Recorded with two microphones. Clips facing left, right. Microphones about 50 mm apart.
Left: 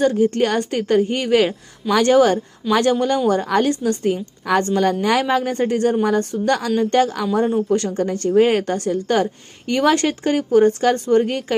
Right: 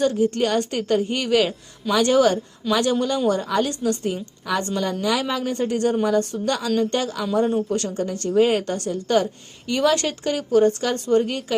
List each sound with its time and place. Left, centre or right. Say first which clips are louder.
0.0 s a woman's voice: left 3 dB; left
7.7 s a woman's voice: left 5 dB; left